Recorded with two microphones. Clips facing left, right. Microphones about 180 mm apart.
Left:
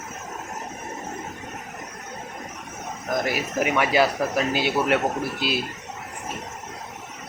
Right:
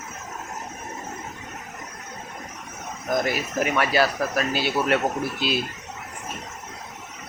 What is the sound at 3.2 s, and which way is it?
Speech, 10° left (ahead or behind).